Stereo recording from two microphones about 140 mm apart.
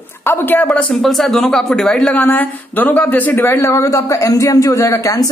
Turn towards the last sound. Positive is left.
turn(degrees=20)  # may be behind; listen again after turning